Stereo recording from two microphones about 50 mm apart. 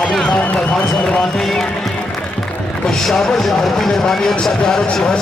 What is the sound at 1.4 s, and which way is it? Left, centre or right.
Speech, centre.